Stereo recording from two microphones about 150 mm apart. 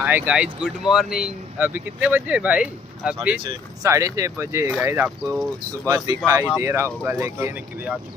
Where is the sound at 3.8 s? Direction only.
20° right (ahead or behind).